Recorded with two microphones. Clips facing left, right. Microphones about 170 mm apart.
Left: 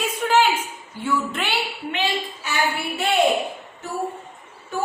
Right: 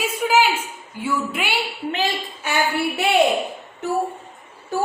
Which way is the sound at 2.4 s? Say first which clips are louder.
Right 6 dB; 55° right (ahead or behind).